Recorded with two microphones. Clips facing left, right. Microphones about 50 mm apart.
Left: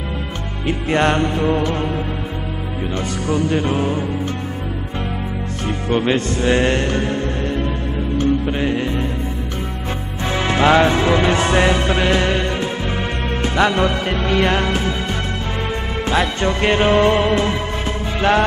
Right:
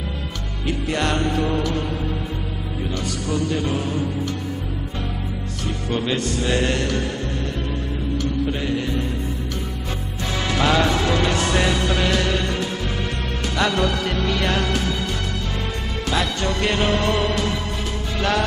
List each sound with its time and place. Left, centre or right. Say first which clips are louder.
0.7 s music: left 6 dB; left
3.0 s music: left 5 dB; left
5.7 s music: left 6 dB; left
10.3 s music: left 6 dB; left
16.1 s music: left 4 dB; left